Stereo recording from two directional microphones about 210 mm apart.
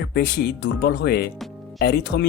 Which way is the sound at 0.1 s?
50° left (ahead or behind).